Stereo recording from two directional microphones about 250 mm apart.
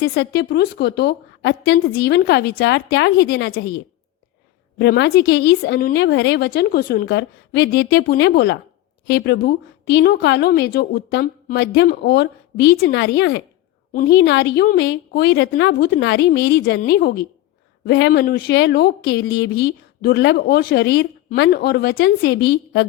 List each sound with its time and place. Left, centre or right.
0.0 s a woman's voice: left
4.8 s a woman's voice: left